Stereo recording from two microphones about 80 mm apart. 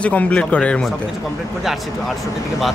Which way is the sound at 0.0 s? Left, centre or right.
Centre.